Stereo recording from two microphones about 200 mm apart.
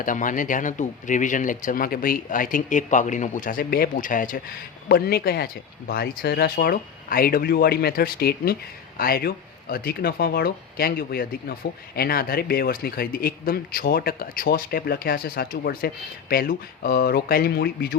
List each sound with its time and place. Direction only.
0.0 s speech: 40° left (ahead or behind)